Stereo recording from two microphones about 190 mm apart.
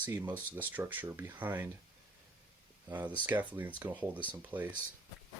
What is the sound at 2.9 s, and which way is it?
Speech, 10° right (ahead or behind).